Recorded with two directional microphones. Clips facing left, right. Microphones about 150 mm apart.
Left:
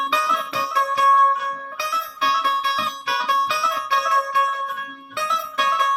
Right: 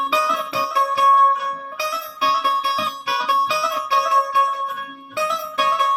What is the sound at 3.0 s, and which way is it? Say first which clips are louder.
Music: right 1 dB; 5° right (ahead or behind).